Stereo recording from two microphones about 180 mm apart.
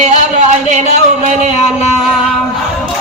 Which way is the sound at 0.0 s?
40° right (ahead or behind).